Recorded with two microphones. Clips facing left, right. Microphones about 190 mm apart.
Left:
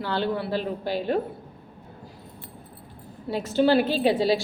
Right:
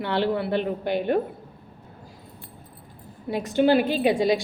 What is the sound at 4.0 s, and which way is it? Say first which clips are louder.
Speech: right 1 dB; 15° right (ahead or behind).